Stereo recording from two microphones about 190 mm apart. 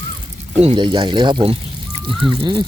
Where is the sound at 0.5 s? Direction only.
30° right (ahead or behind).